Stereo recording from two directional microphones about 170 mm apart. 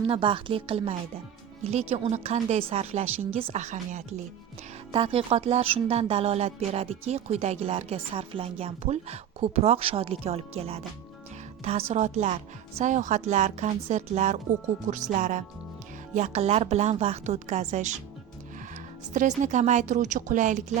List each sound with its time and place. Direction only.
0.1 s speech: 30° right (ahead or behind)
4.9 s speech: 30° right (ahead or behind)
19.4 s speech: 45° right (ahead or behind)